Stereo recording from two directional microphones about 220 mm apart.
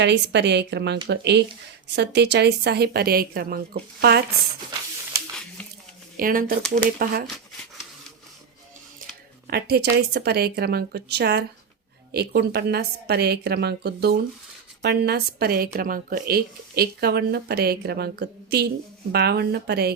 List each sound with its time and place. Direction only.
0.0 s a woman's voice: 50° right (ahead or behind)
6.1 s a woman's voice: 40° right (ahead or behind)
9.5 s a woman's voice: 45° right (ahead or behind)